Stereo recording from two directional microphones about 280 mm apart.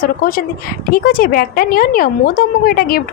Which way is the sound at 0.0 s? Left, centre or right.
Left.